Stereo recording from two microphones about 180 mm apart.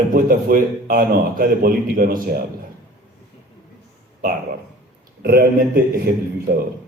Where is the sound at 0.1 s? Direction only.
55° right (ahead or behind).